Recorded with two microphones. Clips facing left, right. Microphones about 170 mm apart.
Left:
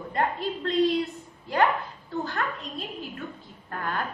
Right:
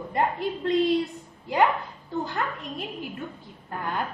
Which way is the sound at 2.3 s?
15° right (ahead or behind).